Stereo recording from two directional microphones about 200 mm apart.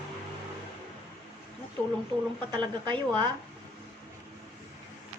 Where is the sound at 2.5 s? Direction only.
20° right (ahead or behind).